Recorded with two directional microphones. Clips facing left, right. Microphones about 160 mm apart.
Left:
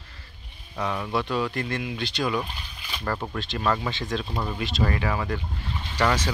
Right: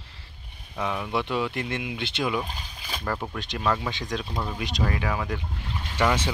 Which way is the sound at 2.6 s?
40° right (ahead or behind).